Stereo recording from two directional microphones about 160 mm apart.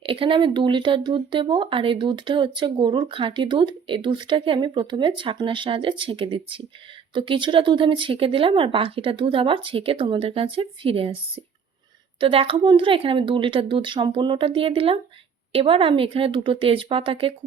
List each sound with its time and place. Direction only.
0.0 s speech: 35° right (ahead or behind)
12.2 s speech: 35° right (ahead or behind)